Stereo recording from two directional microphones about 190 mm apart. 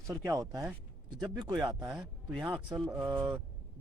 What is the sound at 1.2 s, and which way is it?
Speech, 20° right (ahead or behind).